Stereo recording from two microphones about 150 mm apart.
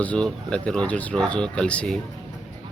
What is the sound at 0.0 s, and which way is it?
Speech, 10° left (ahead or behind).